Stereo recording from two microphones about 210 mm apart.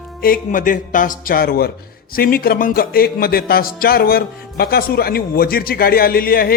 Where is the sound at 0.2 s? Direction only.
40° left (ahead or behind).